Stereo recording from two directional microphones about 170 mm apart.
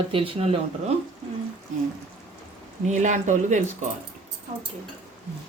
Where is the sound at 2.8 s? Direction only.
45° right (ahead or behind).